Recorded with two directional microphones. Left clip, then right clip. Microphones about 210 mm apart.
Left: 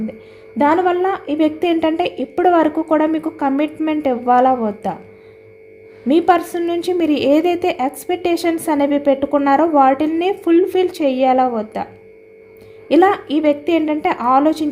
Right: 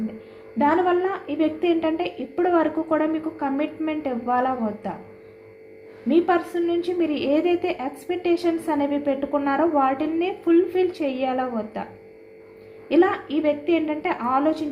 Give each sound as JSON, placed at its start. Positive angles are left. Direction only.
{"t": 0.6, "sound": "a woman's voice", "side_deg": 55}
{"t": 6.1, "sound": "a woman's voice", "side_deg": 55}
{"t": 12.9, "sound": "a woman's voice", "side_deg": 55}